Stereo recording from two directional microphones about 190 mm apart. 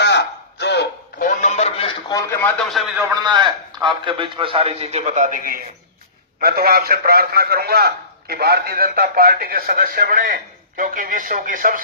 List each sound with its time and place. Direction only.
0.0 s a sound: 65° left (ahead or behind)
1.2 s music: 40° left (ahead or behind)
2.0 s a man's voice: 15° left (ahead or behind)
2.6 s a man's voice: centre (ahead or behind)
3.2 s a man's voice: 25° right (ahead or behind); by 11.8 s 45° right (ahead or behind)